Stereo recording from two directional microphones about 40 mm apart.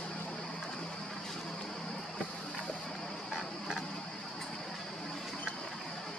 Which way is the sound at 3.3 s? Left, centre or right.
Centre.